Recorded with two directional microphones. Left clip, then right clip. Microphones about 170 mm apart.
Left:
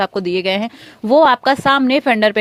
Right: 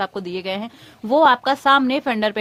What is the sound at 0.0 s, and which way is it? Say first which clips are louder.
Speech: left 8 dB; 35° left (ahead or behind).